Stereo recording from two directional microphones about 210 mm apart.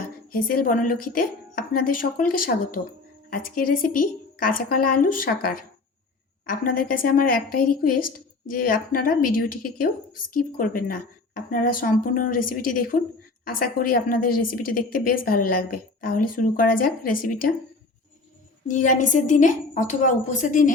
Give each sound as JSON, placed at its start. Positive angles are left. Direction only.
{"t": 0.3, "sound": "a woman's voice", "side_deg": 45}
{"t": 18.7, "sound": "a woman's voice", "side_deg": 35}